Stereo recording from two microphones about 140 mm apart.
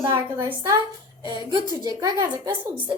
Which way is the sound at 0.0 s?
15° right (ahead or behind).